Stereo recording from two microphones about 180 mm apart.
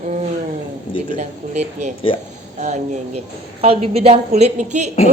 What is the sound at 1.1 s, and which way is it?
A woman's voice, 40° right (ahead or behind).